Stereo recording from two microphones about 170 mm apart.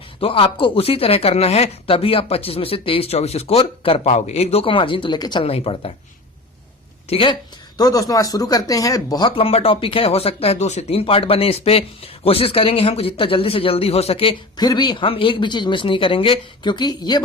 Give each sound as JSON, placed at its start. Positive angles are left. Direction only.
{"t": 0.2, "sound": "speech", "side_deg": 30}
{"t": 7.1, "sound": "speech", "side_deg": 30}
{"t": 7.8, "sound": "speech", "side_deg": 20}